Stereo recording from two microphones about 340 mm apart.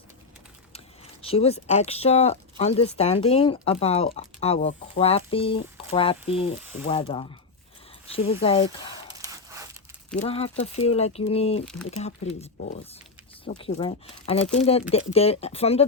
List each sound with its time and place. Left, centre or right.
1.2 s speech: centre
6.6 s speech: centre
6.8 s speech: centre
9.2 s tearing: centre
10.2 s speech: centre